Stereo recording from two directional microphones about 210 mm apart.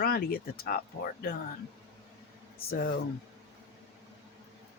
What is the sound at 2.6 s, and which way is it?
Speech, 45° left (ahead or behind).